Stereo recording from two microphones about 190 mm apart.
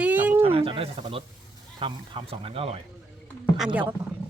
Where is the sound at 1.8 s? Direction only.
25° right (ahead or behind).